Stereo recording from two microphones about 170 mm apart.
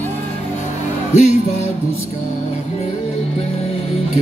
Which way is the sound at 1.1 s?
45° left (ahead or behind).